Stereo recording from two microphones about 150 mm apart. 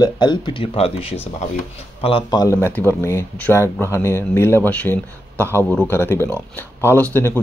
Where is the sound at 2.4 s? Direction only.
15° left (ahead or behind).